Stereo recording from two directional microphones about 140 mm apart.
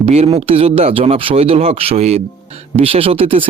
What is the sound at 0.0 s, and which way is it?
Speech, 45° right (ahead or behind).